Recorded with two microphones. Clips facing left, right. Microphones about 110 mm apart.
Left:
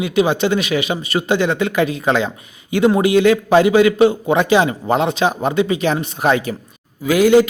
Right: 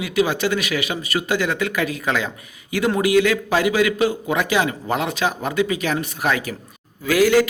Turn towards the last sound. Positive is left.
turn(degrees=20)  # may be behind; listen again after turning